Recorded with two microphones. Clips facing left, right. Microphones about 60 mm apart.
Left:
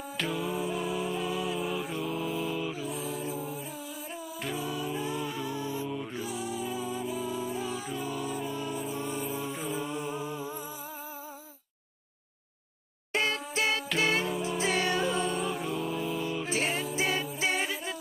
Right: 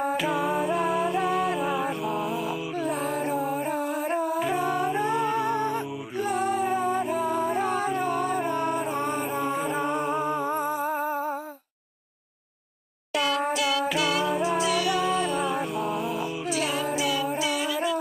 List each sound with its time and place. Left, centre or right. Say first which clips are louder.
0.3 s music: right 7 dB; right
13.1 s music: right 5 dB; left
14.2 s music: right 7 dB; right
14.6 s music: right 4 dB; left
15.1 s music: right 5 dB; right
16.4 s music: right 4 dB; left